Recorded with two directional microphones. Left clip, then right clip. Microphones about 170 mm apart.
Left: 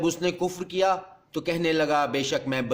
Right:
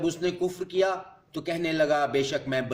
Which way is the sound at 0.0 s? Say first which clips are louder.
Left 2 dB; 50° left (ahead or behind).